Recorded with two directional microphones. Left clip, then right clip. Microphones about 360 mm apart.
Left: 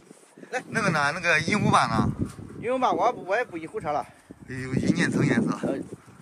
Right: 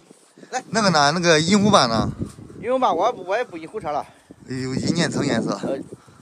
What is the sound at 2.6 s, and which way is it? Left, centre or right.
Speech, right.